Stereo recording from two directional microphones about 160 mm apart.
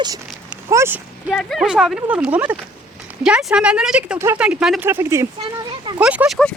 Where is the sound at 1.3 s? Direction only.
Centre (ahead or behind).